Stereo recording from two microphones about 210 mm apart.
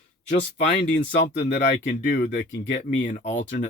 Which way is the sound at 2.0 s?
45° left (ahead or behind).